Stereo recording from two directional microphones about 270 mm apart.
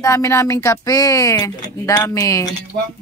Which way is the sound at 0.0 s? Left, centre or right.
Centre.